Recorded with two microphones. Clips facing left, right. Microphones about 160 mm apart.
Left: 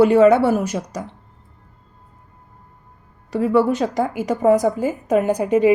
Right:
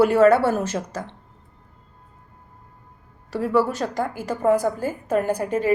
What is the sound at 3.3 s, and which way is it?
Speech, centre (ahead or behind).